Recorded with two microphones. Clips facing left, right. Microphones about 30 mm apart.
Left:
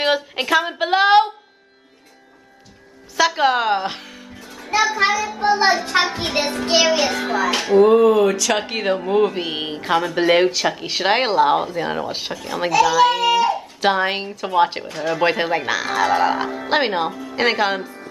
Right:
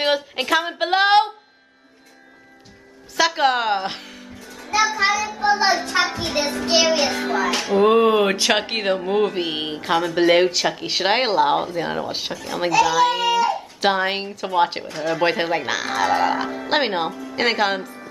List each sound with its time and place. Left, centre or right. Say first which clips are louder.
0.0 s speech: left 1 dB; centre
3.2 s speech: left 1 dB; centre
4.4 s music: left 1 dB; centre
6.7 s speech: left 1 dB; centre
7.8 s a sound: left 2 dB; right
8.5 s speech: even; centre
8.8 s speech: left 4 dB; centre
17.1 s speech: left 1 dB; left
17.4 s speech: left 1 dB; centre